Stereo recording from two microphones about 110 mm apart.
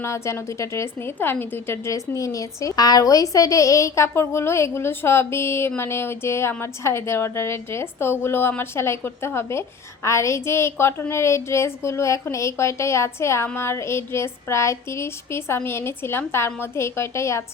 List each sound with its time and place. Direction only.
0.0 s a woman's voice: 25° left (ahead or behind)